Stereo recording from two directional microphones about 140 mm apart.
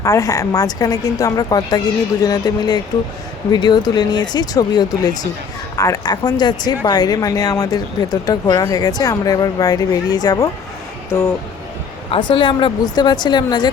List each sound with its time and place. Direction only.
0.0 s speech: 25° left (ahead or behind)
12.3 s a woman's voice: 35° left (ahead or behind)